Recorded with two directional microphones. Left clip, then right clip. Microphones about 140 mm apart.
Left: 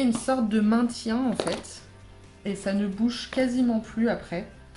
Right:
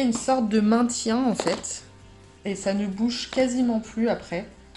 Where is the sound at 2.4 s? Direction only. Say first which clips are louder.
Right 2 dB; 20° right (ahead or behind).